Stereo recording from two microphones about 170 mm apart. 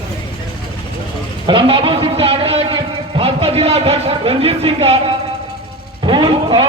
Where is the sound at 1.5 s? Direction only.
30° right (ahead or behind).